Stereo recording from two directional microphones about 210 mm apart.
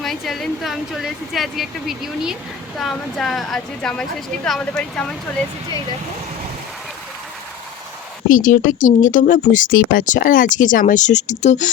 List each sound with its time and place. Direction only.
0.0 s a woman's voice: centre (ahead or behind)
8.3 s speech: 40° left (ahead or behind)